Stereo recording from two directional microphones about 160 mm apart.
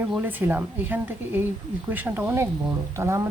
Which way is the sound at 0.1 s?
10° right (ahead or behind).